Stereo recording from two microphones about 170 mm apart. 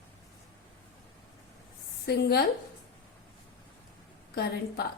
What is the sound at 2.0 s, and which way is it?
Speech, 65° left (ahead or behind).